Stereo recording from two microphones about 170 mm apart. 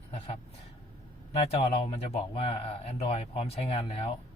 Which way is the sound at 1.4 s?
35° left (ahead or behind).